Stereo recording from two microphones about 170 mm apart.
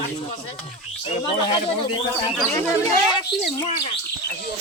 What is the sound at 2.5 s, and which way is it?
Speech, 20° left (ahead or behind).